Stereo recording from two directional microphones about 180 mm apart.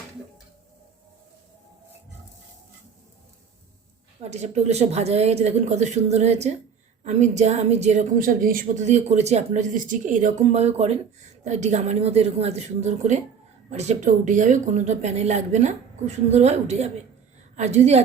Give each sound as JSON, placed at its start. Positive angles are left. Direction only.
{"t": 4.2, "sound": "a woman's voice", "side_deg": -40}